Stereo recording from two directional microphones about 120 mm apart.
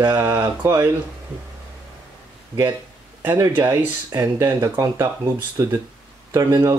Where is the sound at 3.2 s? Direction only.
20° right (ahead or behind).